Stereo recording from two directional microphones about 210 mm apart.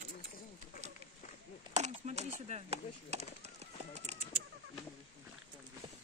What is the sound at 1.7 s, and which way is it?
Speech, 35° right (ahead or behind).